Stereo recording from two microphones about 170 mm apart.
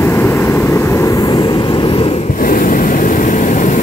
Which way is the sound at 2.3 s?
55° left (ahead or behind).